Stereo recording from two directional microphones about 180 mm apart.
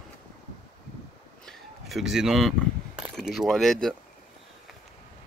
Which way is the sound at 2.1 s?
Centre (ahead or behind).